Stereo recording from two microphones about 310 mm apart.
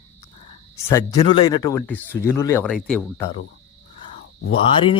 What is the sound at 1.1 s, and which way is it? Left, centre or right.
Speech, centre.